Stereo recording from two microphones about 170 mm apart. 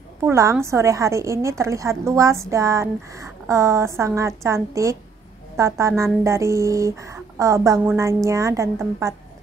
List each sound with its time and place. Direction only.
0.2 s a woman's voice: 15° right (ahead or behind)